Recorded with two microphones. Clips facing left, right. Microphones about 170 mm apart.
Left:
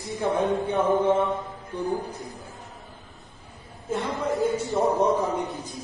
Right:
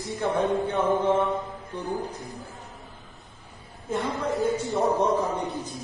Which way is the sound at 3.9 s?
Centre (ahead or behind).